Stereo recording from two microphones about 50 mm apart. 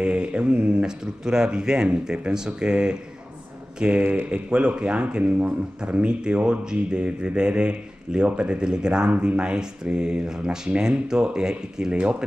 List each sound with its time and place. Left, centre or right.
0.0 s mantra: centre
0.8 s speech: centre
4.0 s speech: right
4.3 s speech: right